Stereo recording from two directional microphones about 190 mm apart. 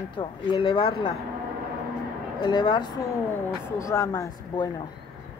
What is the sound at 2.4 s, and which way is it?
A woman's voice, 25° left (ahead or behind).